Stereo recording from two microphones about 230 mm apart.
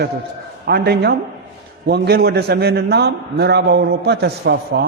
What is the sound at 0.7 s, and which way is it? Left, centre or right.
A man's voice, right.